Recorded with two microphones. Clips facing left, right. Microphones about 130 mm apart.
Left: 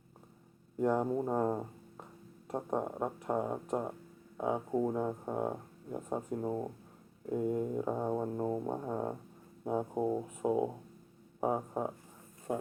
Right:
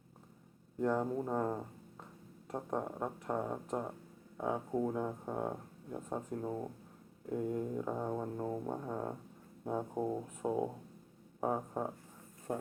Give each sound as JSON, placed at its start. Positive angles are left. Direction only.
{"t": 0.8, "sound": "speech", "side_deg": 15}